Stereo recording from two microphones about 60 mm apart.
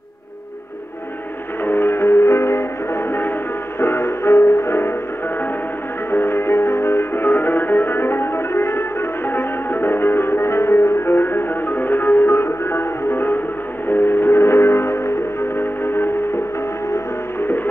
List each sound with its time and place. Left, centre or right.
1.6 s music: left
6.1 s music: left